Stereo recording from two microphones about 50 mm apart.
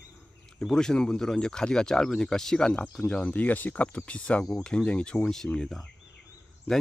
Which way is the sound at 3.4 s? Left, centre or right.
Left.